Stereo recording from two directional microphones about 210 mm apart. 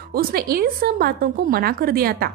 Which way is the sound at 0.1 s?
45° right (ahead or behind).